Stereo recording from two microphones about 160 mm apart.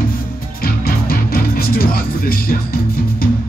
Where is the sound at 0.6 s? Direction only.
65° left (ahead or behind).